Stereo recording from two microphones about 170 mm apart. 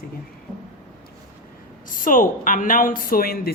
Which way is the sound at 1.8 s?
55° left (ahead or behind).